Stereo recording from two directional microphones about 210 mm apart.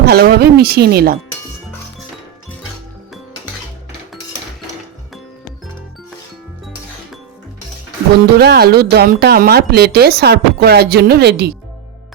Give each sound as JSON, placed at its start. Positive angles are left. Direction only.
{"t": 0.0, "sound": "speech", "side_deg": -50}
{"t": 8.4, "sound": "speech", "side_deg": -50}